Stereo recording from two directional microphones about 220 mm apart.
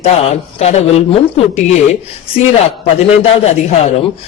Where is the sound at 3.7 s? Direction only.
30° left (ahead or behind).